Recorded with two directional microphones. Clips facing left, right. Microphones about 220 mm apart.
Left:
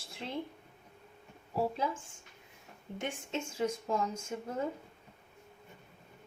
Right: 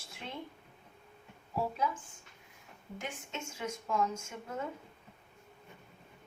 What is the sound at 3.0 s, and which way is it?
A woman's voice, 30° left (ahead or behind).